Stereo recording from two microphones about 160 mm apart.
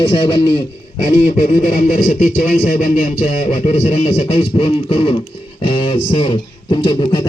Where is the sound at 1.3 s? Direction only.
55° left (ahead or behind).